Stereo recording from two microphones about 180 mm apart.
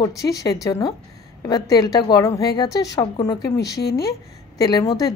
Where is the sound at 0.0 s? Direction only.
20° left (ahead or behind).